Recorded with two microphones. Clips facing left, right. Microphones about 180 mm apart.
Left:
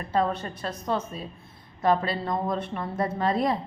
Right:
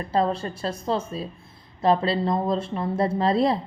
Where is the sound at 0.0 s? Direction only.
35° right (ahead or behind).